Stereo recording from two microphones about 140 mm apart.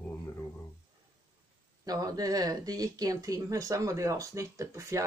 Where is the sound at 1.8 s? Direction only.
25° right (ahead or behind).